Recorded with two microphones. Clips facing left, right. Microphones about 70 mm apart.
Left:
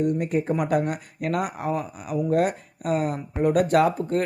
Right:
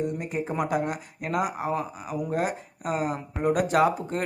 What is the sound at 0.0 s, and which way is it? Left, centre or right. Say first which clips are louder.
A man's voice: left 6 dB; left.